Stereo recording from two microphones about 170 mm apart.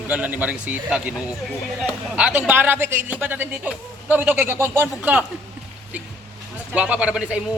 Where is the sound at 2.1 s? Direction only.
5° right (ahead or behind).